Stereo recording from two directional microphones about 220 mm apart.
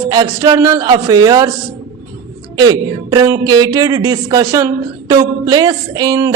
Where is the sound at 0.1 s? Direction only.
20° right (ahead or behind).